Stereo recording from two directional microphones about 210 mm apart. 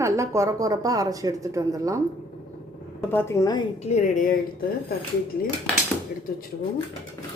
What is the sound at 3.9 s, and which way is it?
Speech, 30° left (ahead or behind).